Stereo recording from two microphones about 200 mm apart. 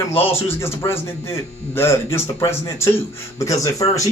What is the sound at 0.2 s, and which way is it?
Speech, 10° left (ahead or behind).